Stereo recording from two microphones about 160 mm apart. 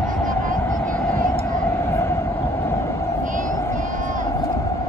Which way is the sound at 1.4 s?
15° left (ahead or behind).